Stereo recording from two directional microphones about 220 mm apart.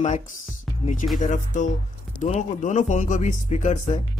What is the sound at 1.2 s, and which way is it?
Speech, 35° left (ahead or behind).